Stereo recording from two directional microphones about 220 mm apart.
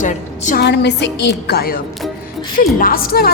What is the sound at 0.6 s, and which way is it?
A woman's voice, 50° left (ahead or behind).